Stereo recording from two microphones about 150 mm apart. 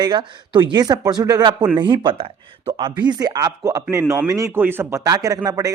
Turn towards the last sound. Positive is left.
turn(degrees=-25)  # may be behind; listen again after turning